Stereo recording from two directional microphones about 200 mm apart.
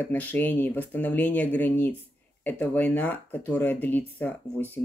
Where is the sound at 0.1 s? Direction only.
10° left (ahead or behind).